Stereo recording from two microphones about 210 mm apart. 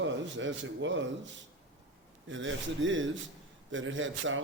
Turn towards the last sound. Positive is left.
turn(degrees=-65)  # may be behind; listen again after turning